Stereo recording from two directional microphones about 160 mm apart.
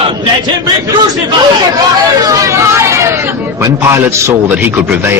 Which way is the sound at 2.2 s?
20° right (ahead or behind).